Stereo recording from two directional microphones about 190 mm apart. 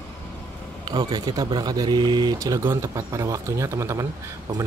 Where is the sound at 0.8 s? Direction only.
20° right (ahead or behind).